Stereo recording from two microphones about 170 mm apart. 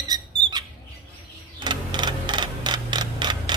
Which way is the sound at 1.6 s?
25° right (ahead or behind).